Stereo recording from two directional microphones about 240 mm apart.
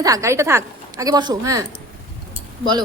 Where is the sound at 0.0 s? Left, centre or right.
Centre.